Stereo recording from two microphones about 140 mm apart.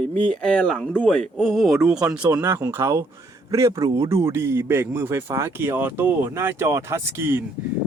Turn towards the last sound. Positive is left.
turn(degrees=-20)  # may be behind; listen again after turning